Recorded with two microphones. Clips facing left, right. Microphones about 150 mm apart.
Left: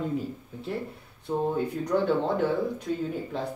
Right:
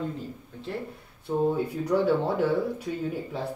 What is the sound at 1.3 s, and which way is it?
Speech, 5° right (ahead or behind).